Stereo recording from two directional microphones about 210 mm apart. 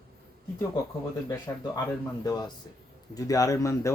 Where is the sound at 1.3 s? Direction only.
15° left (ahead or behind).